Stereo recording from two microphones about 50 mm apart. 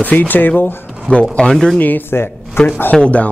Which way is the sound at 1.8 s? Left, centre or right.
Left.